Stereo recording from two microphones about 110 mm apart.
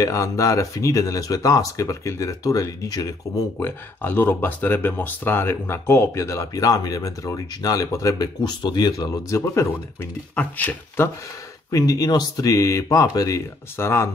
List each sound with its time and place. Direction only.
0.0 s speech: 30° left (ahead or behind)
3.5 s speech: 20° left (ahead or behind)
10.3 s speech: 15° left (ahead or behind)
11.7 s speech: 35° left (ahead or behind)